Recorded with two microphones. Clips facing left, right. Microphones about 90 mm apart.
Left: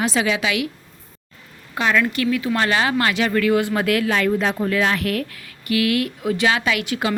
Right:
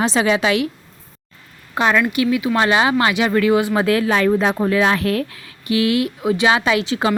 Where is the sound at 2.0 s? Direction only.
15° right (ahead or behind).